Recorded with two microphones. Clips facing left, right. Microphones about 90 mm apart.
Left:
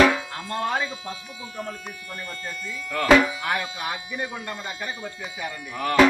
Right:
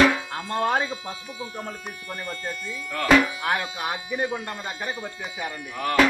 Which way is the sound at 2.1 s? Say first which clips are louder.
Right 3 dB; 30° right (ahead or behind).